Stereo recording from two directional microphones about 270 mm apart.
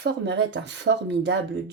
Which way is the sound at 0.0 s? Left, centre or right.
Right.